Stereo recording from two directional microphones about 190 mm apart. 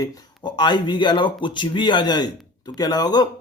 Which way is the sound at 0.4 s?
25° left (ahead or behind).